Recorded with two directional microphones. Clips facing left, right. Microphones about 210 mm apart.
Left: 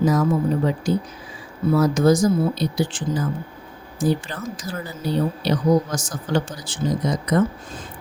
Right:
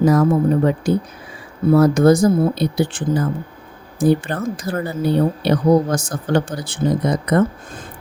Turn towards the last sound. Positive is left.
turn(degrees=-60)  # may be behind; listen again after turning